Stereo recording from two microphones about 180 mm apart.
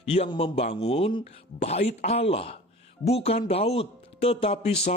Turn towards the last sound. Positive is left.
turn(degrees=35)  # may be behind; listen again after turning